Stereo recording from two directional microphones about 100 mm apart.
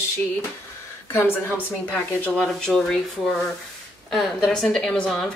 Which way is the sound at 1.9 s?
10° left (ahead or behind).